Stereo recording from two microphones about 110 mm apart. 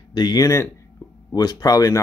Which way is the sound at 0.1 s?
40° left (ahead or behind).